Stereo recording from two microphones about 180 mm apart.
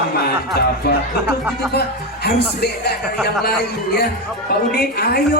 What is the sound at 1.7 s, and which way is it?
A woman's voice, 65° left (ahead or behind).